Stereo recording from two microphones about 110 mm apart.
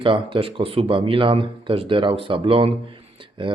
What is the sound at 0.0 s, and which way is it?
Speech, 50° right (ahead or behind).